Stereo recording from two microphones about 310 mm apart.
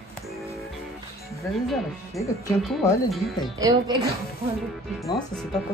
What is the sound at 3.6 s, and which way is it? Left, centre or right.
Speech, centre.